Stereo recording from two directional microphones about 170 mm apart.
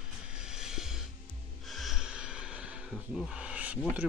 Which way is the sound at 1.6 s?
Centre (ahead or behind).